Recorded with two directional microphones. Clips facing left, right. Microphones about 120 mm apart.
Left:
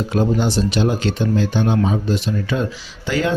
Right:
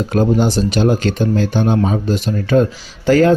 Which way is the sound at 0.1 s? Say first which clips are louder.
Right 4 dB; 45° right (ahead or behind).